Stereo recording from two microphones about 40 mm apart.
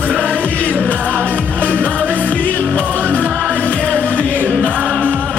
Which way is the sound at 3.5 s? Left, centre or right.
Right.